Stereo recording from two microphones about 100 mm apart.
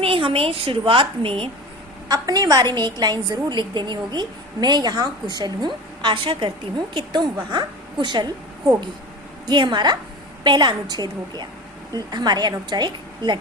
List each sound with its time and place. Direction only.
0.0 s a woman's voice: 65° right (ahead or behind)
2.0 s a woman's voice: 40° right (ahead or behind)
9.5 s a woman's voice: 45° right (ahead or behind)